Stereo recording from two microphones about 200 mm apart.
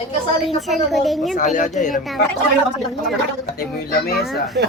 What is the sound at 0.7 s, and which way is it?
Speech, centre (ahead or behind).